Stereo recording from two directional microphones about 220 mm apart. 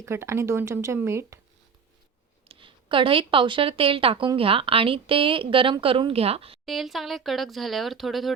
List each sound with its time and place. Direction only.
0.0 s speech: 10° right (ahead or behind)
2.5 s speech: 25° right (ahead or behind)
6.7 s speech: centre (ahead or behind)